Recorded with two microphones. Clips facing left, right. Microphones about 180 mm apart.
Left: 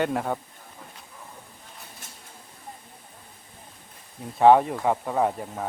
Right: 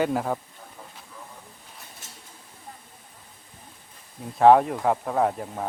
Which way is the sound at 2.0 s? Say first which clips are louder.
Left 1 dB; 55° left (ahead or behind).